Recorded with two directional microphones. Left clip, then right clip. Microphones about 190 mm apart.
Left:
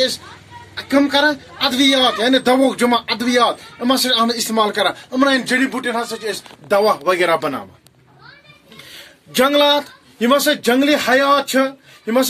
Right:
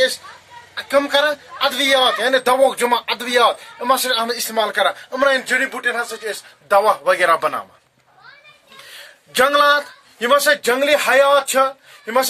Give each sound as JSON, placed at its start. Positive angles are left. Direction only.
{"t": 0.7, "sound": "speech", "side_deg": -45}
{"t": 8.9, "sound": "speech", "side_deg": -40}
{"t": 11.1, "sound": "speech", "side_deg": -50}